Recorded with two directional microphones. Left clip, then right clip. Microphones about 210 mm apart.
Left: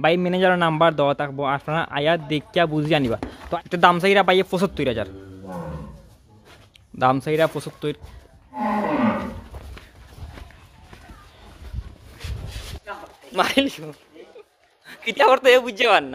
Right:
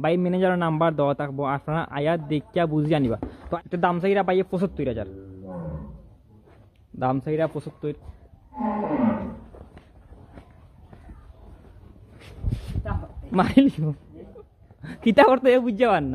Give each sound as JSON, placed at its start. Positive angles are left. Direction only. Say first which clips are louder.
{"t": 0.0, "sound": "speech", "louder": "left 4 dB", "side_deg": 0}
{"t": 3.6, "sound": "a man's voice", "louder": "left 7 dB", "side_deg": 10}
{"t": 7.0, "sound": "a man's voice", "louder": "left 6 dB", "side_deg": 10}
{"t": 12.9, "sound": "zipper", "louder": "even", "side_deg": -25}
{"t": 13.3, "sound": "speech", "louder": "even", "side_deg": 5}